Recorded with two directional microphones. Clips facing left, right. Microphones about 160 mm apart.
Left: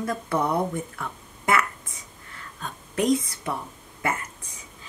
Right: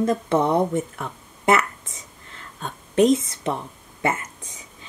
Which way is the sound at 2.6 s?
25° right (ahead or behind).